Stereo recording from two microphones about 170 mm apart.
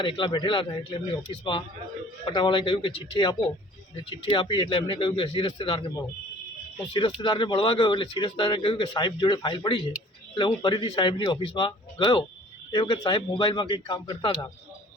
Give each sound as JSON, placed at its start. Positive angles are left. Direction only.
{"t": 0.0, "sound": "a man's voice", "side_deg": 30}